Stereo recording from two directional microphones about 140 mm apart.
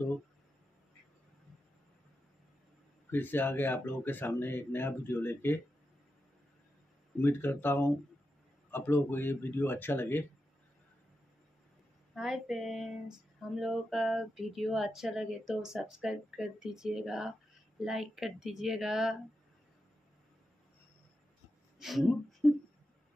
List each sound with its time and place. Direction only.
3.1 s speech: 15° left (ahead or behind)
7.2 s speech: 15° left (ahead or behind)
12.2 s speech: 5° right (ahead or behind)
21.7 s speech: centre (ahead or behind)